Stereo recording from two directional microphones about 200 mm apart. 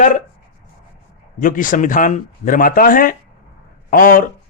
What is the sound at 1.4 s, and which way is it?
Speech, 40° left (ahead or behind).